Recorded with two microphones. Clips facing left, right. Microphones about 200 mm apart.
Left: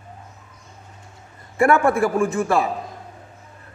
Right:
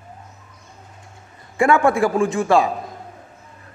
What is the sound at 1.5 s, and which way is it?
Speech, 15° right (ahead or behind).